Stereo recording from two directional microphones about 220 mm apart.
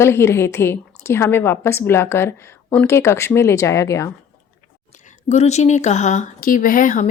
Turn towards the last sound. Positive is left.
turn(degrees=35)  # may be behind; listen again after turning